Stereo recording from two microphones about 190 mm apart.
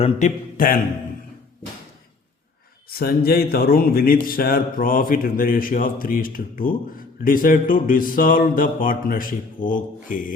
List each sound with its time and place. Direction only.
0.0 s speech: 40° left (ahead or behind)
2.9 s speech: 55° left (ahead or behind)